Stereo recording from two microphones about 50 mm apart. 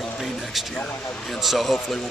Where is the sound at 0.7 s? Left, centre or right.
Centre.